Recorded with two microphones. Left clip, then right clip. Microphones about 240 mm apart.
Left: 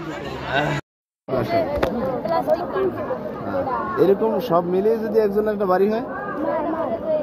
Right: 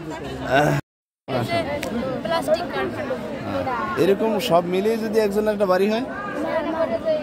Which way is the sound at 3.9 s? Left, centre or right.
Right.